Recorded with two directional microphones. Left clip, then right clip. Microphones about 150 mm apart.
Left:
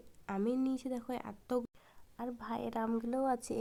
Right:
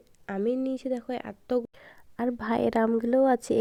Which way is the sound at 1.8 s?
50° right (ahead or behind).